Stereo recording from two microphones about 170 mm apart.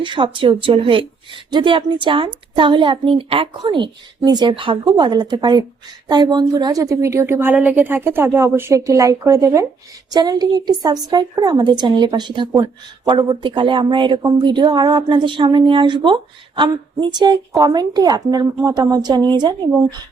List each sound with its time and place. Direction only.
0.0 s a woman's voice: 30° right (ahead or behind)